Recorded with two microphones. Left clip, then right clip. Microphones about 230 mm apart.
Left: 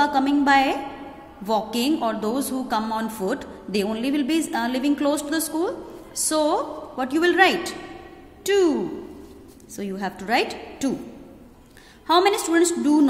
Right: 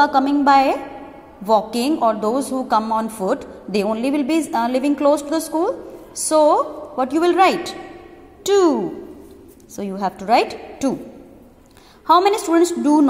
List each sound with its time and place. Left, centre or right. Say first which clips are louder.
0.0 s a woman's voice: right 5 dB; centre
9.8 s a woman's voice: right 6 dB; centre
12.1 s a woman's voice: right 4 dB; centre